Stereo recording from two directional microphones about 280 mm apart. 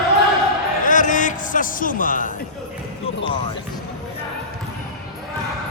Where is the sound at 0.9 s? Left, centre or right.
Left.